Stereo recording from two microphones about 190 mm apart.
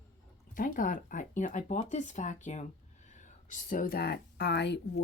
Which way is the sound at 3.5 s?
45° left (ahead or behind).